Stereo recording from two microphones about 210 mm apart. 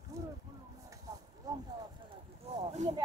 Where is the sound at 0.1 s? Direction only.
15° right (ahead or behind).